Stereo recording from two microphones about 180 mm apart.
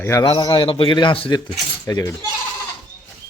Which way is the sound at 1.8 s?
20° left (ahead or behind).